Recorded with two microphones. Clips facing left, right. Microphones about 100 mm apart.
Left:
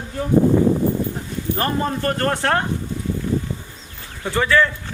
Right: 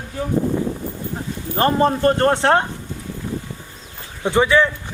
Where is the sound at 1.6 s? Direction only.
25° right (ahead or behind).